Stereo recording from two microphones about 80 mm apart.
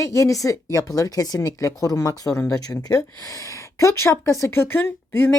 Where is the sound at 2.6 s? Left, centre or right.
Left.